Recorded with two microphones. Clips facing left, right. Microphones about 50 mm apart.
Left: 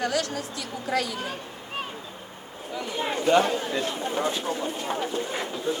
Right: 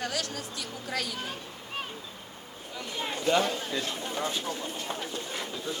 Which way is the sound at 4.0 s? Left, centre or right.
Centre.